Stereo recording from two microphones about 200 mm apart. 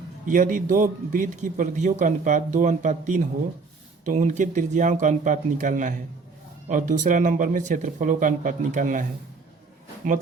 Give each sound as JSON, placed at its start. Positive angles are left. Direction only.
{"t": 0.3, "sound": "a man's voice", "side_deg": -40}